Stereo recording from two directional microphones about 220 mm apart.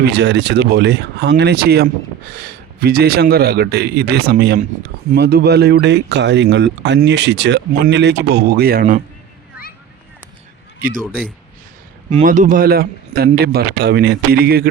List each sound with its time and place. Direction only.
0.0 s speech: 50° right (ahead or behind)
10.8 s a man's voice: 40° right (ahead or behind)
12.1 s a man's voice: 35° right (ahead or behind)